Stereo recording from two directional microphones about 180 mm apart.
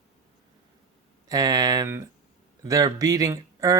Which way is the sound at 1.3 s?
20° right (ahead or behind).